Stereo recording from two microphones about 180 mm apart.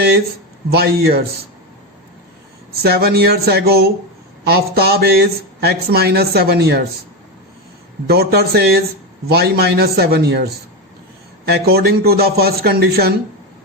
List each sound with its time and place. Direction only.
0.7 s speech: 60° right (ahead or behind)
2.8 s speech: 60° right (ahead or behind)
8.0 s speech: 60° right (ahead or behind)